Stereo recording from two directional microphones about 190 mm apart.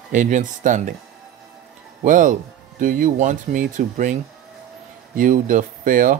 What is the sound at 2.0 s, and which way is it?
Speech, 45° right (ahead or behind).